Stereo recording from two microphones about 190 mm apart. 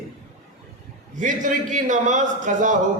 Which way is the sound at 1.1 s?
40° right (ahead or behind).